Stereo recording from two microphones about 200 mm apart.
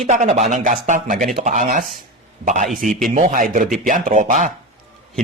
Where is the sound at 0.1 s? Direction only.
35° right (ahead or behind).